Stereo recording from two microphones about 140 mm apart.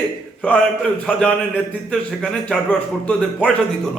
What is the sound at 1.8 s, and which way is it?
A man's voice, 5° left (ahead or behind).